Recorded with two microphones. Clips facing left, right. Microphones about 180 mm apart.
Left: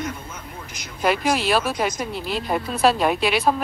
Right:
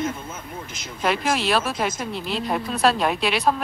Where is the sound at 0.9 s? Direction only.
Centre (ahead or behind).